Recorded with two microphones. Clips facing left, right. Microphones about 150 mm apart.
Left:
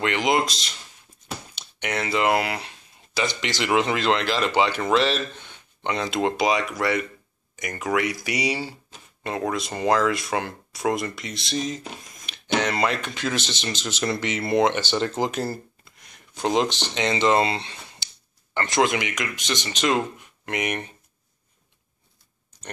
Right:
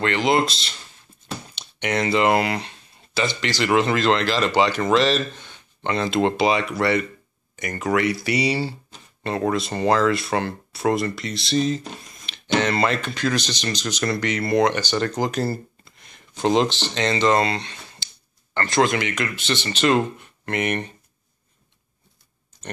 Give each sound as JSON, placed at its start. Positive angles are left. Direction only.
{"t": 0.0, "sound": "speech", "side_deg": 15}
{"t": 1.3, "sound": "a sound", "side_deg": 10}
{"t": 3.3, "sound": "speech", "side_deg": 20}